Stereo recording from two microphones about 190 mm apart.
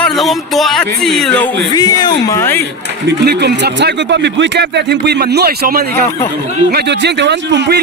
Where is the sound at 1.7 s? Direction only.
20° left (ahead or behind).